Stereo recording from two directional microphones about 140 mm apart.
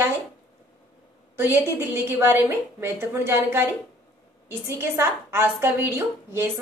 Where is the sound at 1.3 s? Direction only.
15° right (ahead or behind).